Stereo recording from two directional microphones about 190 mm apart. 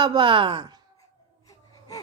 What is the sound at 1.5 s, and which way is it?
Gasp, 20° left (ahead or behind).